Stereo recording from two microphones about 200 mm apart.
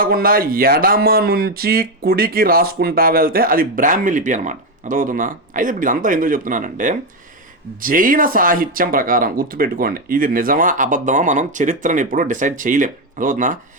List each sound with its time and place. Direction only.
0.0 s speech: 45° right (ahead or behind)